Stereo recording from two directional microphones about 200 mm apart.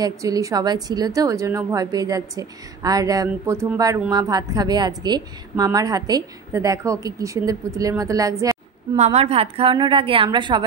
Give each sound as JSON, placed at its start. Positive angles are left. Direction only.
{"t": 0.0, "sound": "a woman's voice", "side_deg": -15}
{"t": 8.9, "sound": "a woman's voice", "side_deg": -35}